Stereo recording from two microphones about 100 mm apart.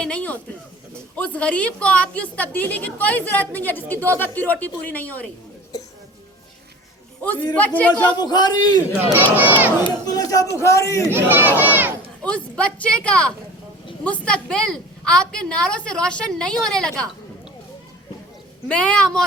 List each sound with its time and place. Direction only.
0.0 s a woman's voice: 15° left (ahead or behind)
7.5 s a woman's voice: 15° left (ahead or behind)
8.1 s a man's voice: 45° left (ahead or behind)
9.3 s speech: 20° right (ahead or behind)
10.1 s a man's voice: 40° left (ahead or behind)
11.1 s speech: 20° right (ahead or behind)
12.2 s a woman's voice: 10° left (ahead or behind)
18.7 s a woman's voice: 10° left (ahead or behind)